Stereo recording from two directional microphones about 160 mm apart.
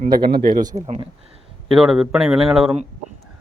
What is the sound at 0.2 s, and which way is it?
Speech, 70° right (ahead or behind).